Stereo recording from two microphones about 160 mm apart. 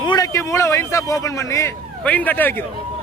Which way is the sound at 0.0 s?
25° left (ahead or behind).